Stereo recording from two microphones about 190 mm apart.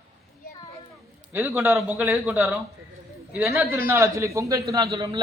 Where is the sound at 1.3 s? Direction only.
10° right (ahead or behind).